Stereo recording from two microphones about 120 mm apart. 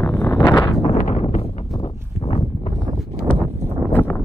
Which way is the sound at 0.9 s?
70° left (ahead or behind).